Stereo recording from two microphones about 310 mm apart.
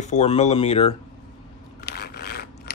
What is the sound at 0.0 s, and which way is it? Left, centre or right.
Speech, left.